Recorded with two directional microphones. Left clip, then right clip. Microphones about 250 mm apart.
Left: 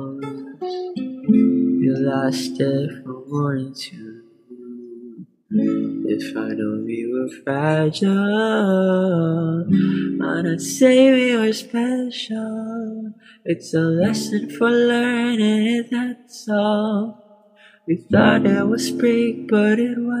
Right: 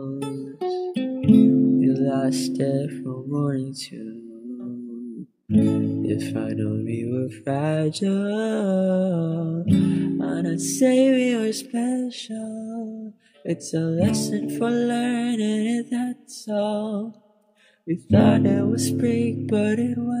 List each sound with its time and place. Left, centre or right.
0.7 s music: right
5.6 s speech: right
13.5 s speech: right